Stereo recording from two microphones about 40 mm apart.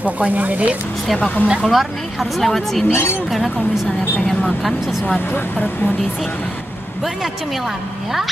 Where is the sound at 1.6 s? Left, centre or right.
Centre.